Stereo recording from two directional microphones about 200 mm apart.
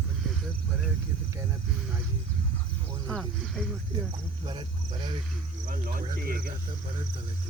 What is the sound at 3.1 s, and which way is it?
Speech, centre (ahead or behind).